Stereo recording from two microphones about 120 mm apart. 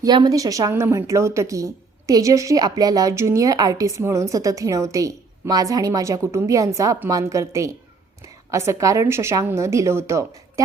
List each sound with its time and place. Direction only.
0.0 s a woman's voice: 35° right (ahead or behind)